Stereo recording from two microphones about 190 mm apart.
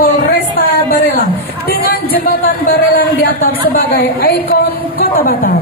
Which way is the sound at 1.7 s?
55° left (ahead or behind).